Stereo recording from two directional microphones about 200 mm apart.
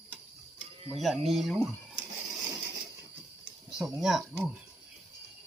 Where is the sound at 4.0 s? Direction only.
Centre (ahead or behind).